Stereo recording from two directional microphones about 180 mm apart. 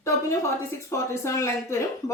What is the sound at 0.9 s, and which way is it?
Speech, 15° left (ahead or behind).